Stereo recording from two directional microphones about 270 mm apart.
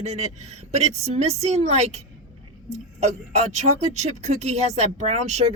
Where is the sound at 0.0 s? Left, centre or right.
Right.